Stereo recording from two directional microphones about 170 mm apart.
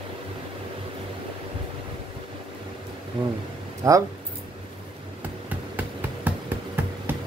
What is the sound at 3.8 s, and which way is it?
Speech, 20° right (ahead or behind).